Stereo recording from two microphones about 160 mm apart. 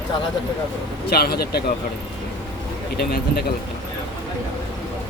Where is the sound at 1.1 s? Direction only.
75° left (ahead or behind).